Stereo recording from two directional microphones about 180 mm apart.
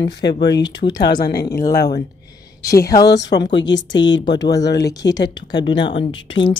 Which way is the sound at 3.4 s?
80° left.